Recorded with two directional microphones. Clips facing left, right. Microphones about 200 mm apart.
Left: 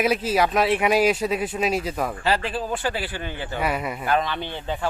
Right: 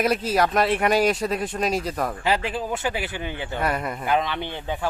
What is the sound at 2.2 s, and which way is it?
Speech, 15° right (ahead or behind).